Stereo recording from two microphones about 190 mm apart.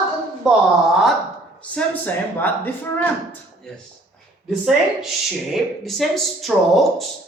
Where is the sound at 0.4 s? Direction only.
5° right (ahead or behind).